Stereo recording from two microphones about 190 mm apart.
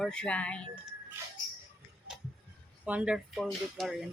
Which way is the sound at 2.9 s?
5° right (ahead or behind).